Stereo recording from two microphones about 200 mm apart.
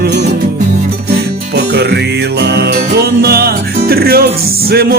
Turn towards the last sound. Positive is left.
turn(degrees=-50)  # may be behind; listen again after turning